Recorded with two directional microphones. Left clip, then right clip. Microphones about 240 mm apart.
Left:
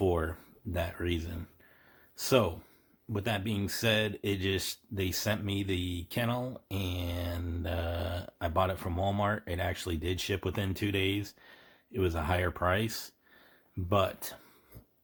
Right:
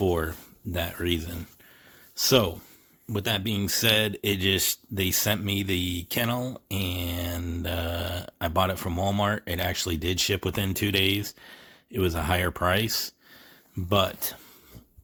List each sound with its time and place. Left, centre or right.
0.0 s speech: right